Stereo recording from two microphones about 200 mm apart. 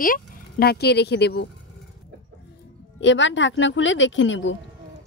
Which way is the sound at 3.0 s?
65° left (ahead or behind).